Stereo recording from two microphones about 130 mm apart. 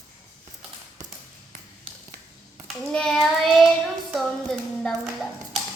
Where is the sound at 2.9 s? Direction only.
5° left (ahead or behind).